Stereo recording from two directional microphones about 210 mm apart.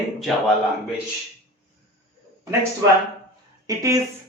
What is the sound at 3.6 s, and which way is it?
Speech, 15° right (ahead or behind).